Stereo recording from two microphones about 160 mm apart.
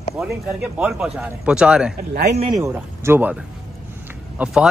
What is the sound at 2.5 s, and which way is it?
Speech, 15° right (ahead or behind).